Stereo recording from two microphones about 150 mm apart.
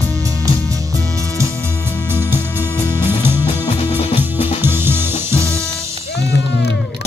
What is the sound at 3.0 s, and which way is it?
Music, 15° right (ahead or behind).